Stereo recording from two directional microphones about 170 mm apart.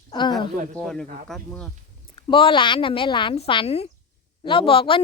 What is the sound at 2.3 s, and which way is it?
A woman's voice, 30° left (ahead or behind).